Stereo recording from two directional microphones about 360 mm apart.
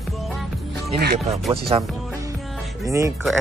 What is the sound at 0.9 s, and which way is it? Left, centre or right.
Speech, right.